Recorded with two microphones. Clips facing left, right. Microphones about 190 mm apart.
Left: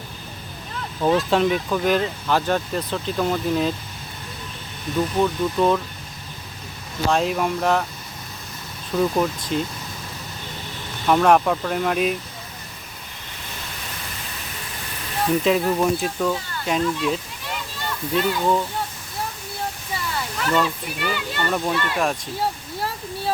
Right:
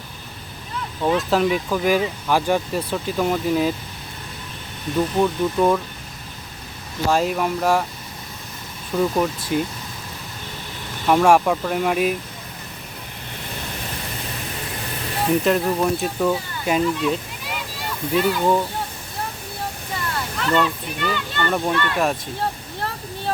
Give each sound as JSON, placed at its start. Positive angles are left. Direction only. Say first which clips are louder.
{"t": 1.0, "sound": "speech", "louder": "left 1 dB", "side_deg": 0}
{"t": 5.2, "sound": "speech", "louder": "right 1 dB", "side_deg": -10}
{"t": 7.1, "sound": "speech", "louder": "right 1 dB", "side_deg": 0}
{"t": 9.0, "sound": "speech", "louder": "even", "side_deg": -5}
{"t": 11.0, "sound": "speech", "louder": "right 1 dB", "side_deg": -10}
{"t": 15.4, "sound": "speech", "louder": "even", "side_deg": 0}
{"t": 20.1, "sound": "speech", "louder": "right 1 dB", "side_deg": 5}